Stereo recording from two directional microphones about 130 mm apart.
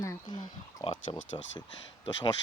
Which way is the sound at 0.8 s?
50° left (ahead or behind).